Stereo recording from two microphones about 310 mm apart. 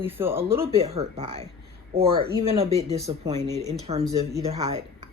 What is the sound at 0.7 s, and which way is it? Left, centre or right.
Speech, centre.